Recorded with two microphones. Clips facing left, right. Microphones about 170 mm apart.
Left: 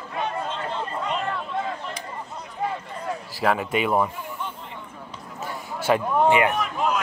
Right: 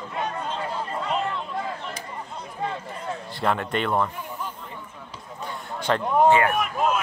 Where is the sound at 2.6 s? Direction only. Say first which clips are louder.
Left 2 dB; 5° left (ahead or behind).